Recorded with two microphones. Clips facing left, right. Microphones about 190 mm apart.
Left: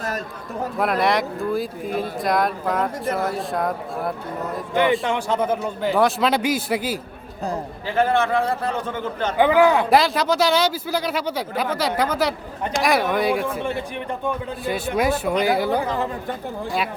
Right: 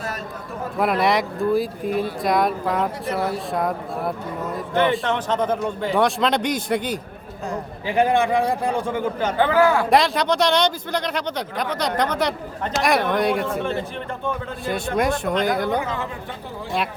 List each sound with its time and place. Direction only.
0.8 s speech: centre (ahead or behind)
4.7 s speech: 15° left (ahead or behind)
7.9 s a man's voice: 15° right (ahead or behind)
9.4 s a man's voice: 15° left (ahead or behind)
9.9 s speech: centre (ahead or behind)
14.6 s speech: 5° left (ahead or behind)
15.8 s speech: 35° left (ahead or behind)